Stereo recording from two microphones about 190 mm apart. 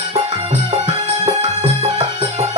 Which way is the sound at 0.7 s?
30° right (ahead or behind).